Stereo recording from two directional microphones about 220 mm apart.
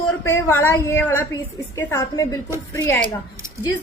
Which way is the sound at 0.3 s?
10° left (ahead or behind).